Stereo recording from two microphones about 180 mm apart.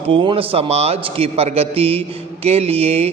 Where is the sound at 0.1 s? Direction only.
25° right (ahead or behind).